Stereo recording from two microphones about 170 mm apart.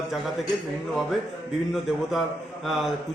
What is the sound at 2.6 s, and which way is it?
Speech, centre (ahead or behind).